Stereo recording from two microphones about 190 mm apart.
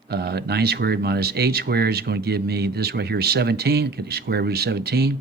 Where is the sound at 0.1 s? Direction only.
60° right (ahead or behind).